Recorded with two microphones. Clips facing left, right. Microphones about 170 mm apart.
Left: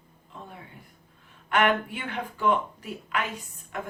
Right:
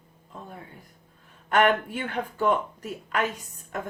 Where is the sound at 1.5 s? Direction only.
40° right (ahead or behind).